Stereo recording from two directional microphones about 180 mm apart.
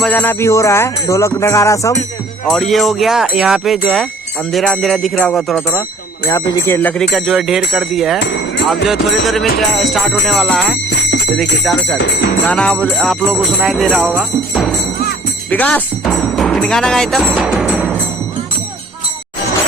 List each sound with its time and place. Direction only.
0.0 s music: 10° left (ahead or behind)
2.5 s jingle bell: centre (ahead or behind)
6.2 s jingle bell: 20° left (ahead or behind); by 8.2 s centre (ahead or behind)
8.2 s music: 90° left
8.9 s jingle bell: centre (ahead or behind)
15.4 s speech: 10° left (ahead or behind)
16.0 s music: centre (ahead or behind)